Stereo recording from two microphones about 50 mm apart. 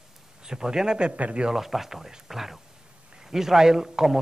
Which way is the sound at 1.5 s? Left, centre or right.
Centre.